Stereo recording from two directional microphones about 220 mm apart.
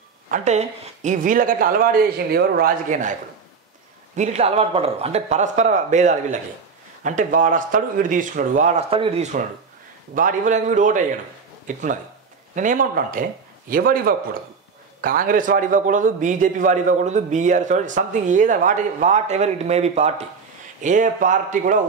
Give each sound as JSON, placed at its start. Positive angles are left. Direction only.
{"t": 0.3, "sound": "a man's voice", "side_deg": -30}